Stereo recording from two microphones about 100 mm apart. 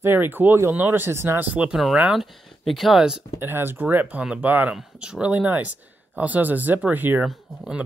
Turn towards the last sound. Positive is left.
turn(degrees=-5)  # may be behind; listen again after turning